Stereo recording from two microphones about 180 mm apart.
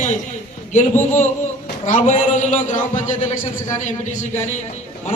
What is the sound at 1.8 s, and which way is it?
A man's voice, 40° left (ahead or behind).